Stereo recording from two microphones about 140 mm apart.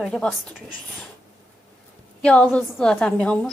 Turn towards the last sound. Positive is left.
turn(degrees=10)  # may be behind; listen again after turning